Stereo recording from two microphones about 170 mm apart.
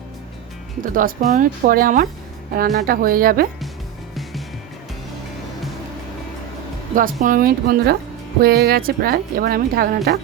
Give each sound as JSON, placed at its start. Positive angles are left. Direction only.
{"t": 0.8, "sound": "speech", "side_deg": -50}
{"t": 6.9, "sound": "speech", "side_deg": -55}